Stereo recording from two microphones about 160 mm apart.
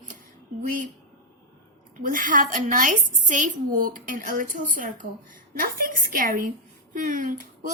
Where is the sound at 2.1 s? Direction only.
55° right (ahead or behind).